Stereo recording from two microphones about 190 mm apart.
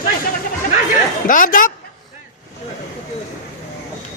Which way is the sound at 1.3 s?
45° left (ahead or behind).